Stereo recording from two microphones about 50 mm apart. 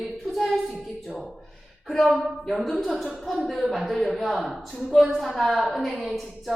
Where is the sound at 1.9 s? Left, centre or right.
Centre.